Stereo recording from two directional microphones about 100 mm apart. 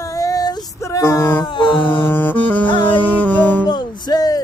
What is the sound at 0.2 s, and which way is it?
Female singing, 35° left (ahead or behind).